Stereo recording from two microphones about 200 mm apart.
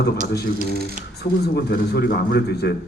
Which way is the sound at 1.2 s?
55° left (ahead or behind).